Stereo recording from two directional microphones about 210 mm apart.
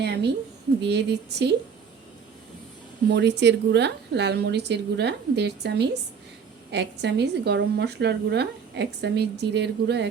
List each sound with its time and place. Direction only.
0.0 s a woman's voice: 55° right (ahead or behind)
3.1 s a woman's voice: 55° right (ahead or behind)